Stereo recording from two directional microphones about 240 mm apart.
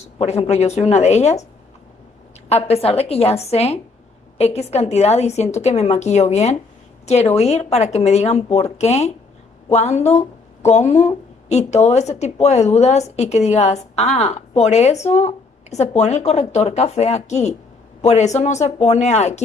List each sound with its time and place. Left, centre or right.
0.0 s a woman's voice: left
2.5 s a woman's voice: left